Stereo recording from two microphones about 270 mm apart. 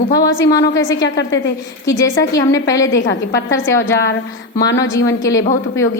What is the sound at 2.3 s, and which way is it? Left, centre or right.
Speech, centre.